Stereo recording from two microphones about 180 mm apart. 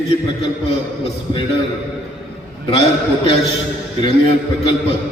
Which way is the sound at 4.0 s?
30° left (ahead or behind).